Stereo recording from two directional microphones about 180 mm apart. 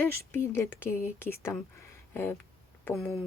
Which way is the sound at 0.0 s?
15° left (ahead or behind).